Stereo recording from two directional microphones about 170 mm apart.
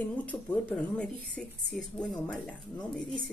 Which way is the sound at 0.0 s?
10° left (ahead or behind).